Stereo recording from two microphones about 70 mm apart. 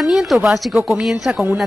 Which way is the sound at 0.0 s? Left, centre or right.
Centre.